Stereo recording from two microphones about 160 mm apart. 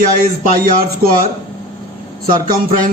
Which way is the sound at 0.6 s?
65° right (ahead or behind).